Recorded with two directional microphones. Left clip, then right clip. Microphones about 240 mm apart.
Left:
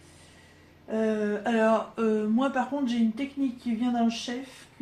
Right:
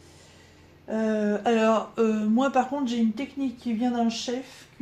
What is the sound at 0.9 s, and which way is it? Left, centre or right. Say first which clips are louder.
Speech: right 1 dB; right.